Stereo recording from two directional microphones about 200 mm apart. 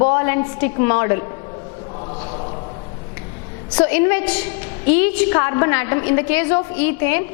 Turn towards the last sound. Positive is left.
turn(degrees=15)  # may be behind; listen again after turning